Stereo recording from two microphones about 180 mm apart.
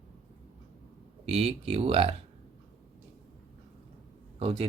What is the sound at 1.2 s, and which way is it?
Speech, 35° right (ahead or behind).